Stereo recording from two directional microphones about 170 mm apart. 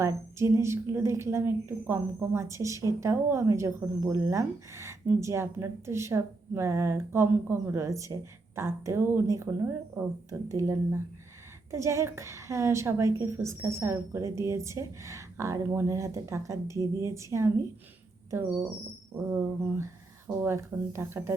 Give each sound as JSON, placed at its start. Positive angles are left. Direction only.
{"t": 0.0, "sound": "a woman's voice", "side_deg": -15}
{"t": 19.1, "sound": "a woman's voice", "side_deg": -15}